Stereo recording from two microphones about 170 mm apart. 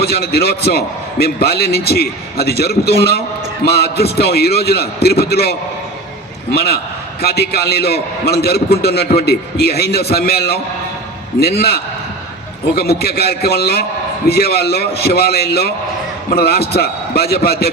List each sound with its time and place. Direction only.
0.0 s a man's voice: 65° left (ahead or behind)